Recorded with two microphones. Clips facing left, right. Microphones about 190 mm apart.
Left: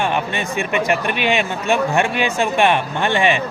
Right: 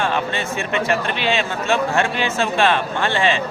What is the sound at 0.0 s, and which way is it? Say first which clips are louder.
Speech: left 1 dB; 15° left (ahead or behind).